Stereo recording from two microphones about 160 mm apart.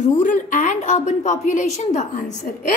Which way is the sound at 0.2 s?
55° left (ahead or behind).